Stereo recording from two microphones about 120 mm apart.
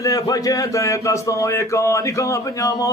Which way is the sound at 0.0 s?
30° left (ahead or behind).